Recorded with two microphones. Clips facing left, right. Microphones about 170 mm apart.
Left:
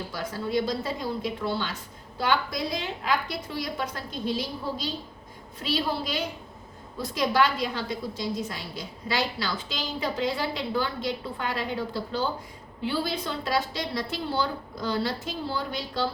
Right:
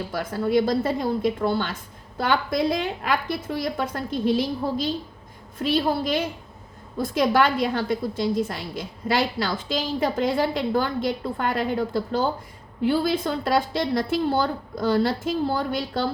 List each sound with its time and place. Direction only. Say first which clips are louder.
0.1 s a woman's voice: right 7 dB; 55° right (ahead or behind)